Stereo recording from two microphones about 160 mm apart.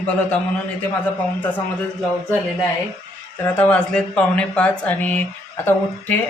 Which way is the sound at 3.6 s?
5° left (ahead or behind).